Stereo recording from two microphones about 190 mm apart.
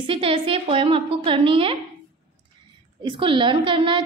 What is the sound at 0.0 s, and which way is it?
A woman's voice, 25° right (ahead or behind).